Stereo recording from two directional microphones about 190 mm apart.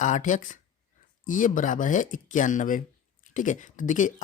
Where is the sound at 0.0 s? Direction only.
40° left (ahead or behind).